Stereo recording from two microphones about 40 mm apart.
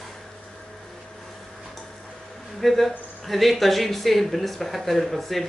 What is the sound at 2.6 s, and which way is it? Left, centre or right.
Speech, centre.